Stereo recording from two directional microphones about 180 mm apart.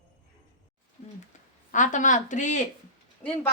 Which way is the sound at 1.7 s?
45° left (ahead or behind).